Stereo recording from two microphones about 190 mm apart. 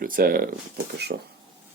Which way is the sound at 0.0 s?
50° right (ahead or behind).